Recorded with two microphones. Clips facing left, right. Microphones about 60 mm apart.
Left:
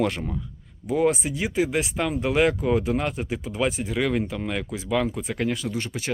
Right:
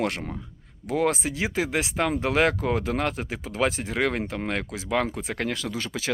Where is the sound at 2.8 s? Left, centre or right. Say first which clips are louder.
Left 1 dB; right.